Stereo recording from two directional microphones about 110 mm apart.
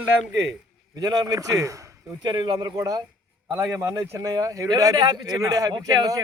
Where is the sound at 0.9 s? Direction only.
35° right (ahead or behind).